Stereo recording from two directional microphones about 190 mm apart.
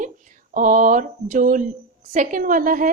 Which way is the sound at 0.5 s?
45° right (ahead or behind).